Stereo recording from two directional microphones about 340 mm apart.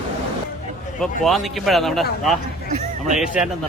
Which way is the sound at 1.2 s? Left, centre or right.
Centre.